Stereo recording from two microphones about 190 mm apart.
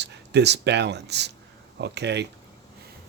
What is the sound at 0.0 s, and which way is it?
Speech, 65° right (ahead or behind).